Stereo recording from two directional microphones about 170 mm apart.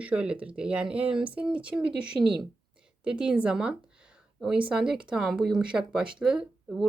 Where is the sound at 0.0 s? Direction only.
5° right (ahead or behind).